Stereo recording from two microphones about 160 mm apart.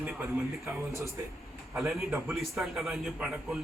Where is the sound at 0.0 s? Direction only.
10° right (ahead or behind).